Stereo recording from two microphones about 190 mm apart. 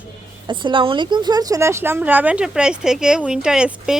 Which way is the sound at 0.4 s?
25° right (ahead or behind).